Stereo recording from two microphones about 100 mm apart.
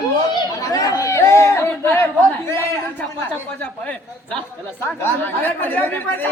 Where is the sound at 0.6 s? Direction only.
35° left (ahead or behind).